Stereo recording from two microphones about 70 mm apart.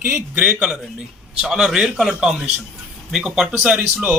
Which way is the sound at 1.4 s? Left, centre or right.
Centre.